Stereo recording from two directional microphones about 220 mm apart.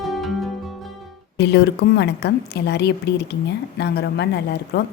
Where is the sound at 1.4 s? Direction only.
50° left (ahead or behind).